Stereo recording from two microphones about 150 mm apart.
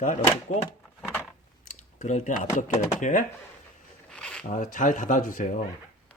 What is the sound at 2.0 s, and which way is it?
Speech, 55° left (ahead or behind).